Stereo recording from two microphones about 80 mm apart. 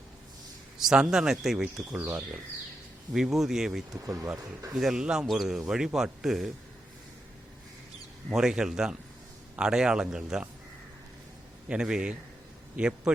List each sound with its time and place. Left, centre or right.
0.8 s speech: centre
3.1 s a man's voice: centre
3.9 s speech: right
4.7 s a man's voice: centre
8.3 s speech: centre
11.7 s a man's voice: centre